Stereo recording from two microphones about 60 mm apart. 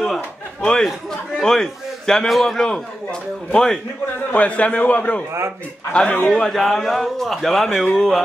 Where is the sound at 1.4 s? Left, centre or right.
Centre.